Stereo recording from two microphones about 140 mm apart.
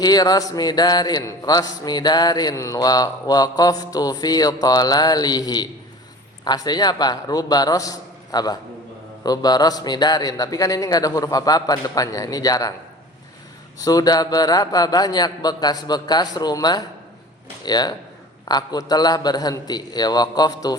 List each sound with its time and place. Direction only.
0.0 s a man's voice: 30° left (ahead or behind)
13.7 s a man's voice: 25° left (ahead or behind)